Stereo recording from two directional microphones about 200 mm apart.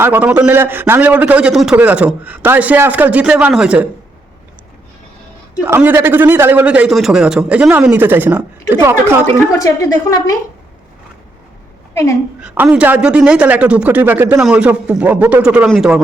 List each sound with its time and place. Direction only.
0.0 s a man's voice: 10° right (ahead or behind)
5.6 s a man's voice: 10° right (ahead or behind)
9.2 s a woman's voice: 15° left (ahead or behind)
12.4 s a man's voice: 5° right (ahead or behind)